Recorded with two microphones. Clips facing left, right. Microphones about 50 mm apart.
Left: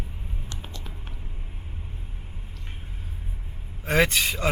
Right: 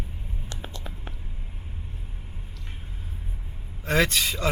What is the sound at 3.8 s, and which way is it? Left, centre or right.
Speech, centre.